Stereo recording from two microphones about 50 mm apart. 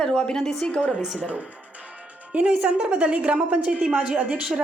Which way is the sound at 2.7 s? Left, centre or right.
Right.